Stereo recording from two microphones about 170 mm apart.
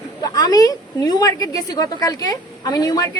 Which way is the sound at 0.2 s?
20° left (ahead or behind).